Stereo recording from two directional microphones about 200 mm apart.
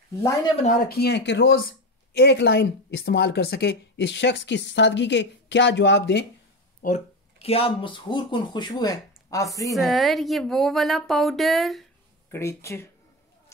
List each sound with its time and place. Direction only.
0.2 s speech: 15° left (ahead or behind)
0.8 s speech: 55° left (ahead or behind)
6.8 s speech: 35° left (ahead or behind); by 9.8 s 15° left (ahead or behind)
9.8 s speech: centre (ahead or behind)
12.3 s speech: 15° left (ahead or behind)